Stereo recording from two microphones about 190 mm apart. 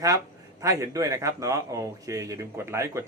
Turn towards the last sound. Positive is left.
turn(degrees=-15)  # may be behind; listen again after turning